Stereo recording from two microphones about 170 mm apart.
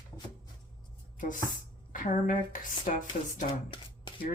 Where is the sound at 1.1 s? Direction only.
50° left (ahead or behind).